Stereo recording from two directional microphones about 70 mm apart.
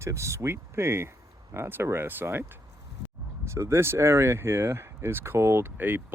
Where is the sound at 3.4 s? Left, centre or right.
Right.